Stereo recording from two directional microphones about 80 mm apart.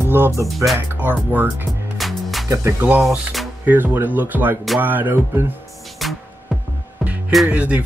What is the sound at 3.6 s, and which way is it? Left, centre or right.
Speech, right.